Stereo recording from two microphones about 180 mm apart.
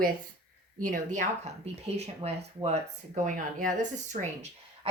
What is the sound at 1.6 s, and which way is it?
Speech, 35° right (ahead or behind).